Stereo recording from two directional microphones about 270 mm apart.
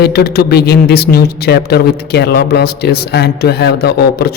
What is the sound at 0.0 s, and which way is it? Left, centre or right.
A man's voice, left.